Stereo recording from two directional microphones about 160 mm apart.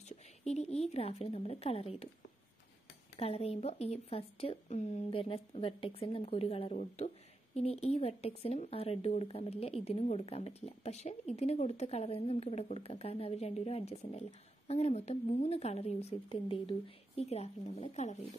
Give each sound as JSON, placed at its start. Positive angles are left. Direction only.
{"t": 0.5, "sound": "speech", "side_deg": 45}
{"t": 3.2, "sound": "speech", "side_deg": 40}